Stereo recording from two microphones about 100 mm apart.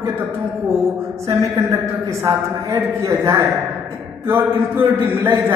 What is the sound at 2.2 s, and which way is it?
A man's voice, 25° right (ahead or behind).